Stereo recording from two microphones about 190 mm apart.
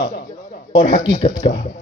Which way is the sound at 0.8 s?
30° left (ahead or behind).